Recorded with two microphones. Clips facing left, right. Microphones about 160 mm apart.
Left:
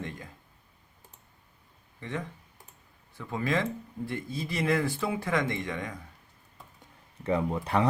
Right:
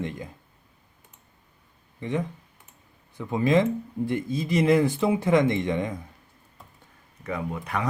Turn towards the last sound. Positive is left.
turn(degrees=30)  # may be behind; listen again after turning